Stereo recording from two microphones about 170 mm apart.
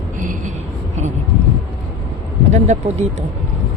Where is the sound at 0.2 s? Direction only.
50° right (ahead or behind).